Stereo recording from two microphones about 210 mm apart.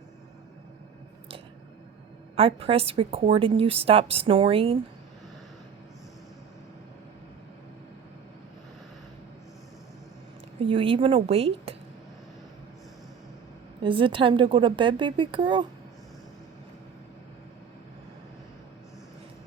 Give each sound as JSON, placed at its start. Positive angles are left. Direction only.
{"t": 2.3, "sound": "a woman's voice", "side_deg": -25}
{"t": 10.7, "sound": "a woman's voice", "side_deg": -25}
{"t": 13.8, "sound": "a woman's voice", "side_deg": -25}